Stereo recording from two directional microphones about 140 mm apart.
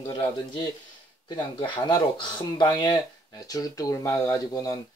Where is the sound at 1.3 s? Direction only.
35° left (ahead or behind).